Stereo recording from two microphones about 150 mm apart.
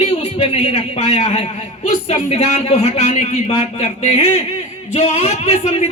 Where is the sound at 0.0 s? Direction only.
45° left (ahead or behind).